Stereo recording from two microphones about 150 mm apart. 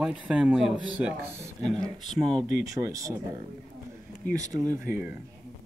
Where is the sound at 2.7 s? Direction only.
20° right (ahead or behind).